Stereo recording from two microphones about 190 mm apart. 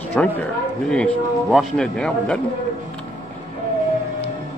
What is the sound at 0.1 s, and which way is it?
Speech, 5° left (ahead or behind).